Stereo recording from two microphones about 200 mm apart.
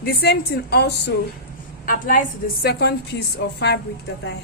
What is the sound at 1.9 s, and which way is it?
Speech, 45° left (ahead or behind).